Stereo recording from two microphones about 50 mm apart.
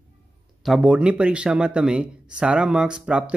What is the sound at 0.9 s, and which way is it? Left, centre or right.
Speech, right.